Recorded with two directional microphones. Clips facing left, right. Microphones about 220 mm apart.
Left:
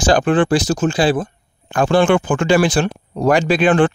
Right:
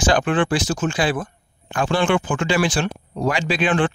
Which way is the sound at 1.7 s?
45° left (ahead or behind).